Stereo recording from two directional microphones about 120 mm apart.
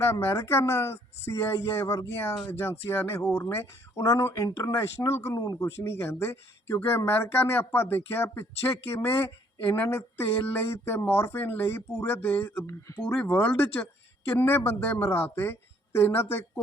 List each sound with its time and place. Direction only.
0.0 s speech: 20° left (ahead or behind)